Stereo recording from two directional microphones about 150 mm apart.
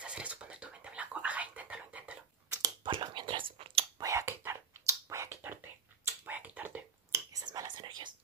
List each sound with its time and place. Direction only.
0.0 s whispering: 10° right (ahead or behind)
2.5 s whispering: 30° right (ahead or behind)
4.0 s whispering: 20° right (ahead or behind)
6.2 s a sound: 10° right (ahead or behind)
7.3 s whispering: 25° right (ahead or behind)